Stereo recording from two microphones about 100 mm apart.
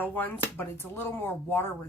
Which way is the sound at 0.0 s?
20° left (ahead or behind).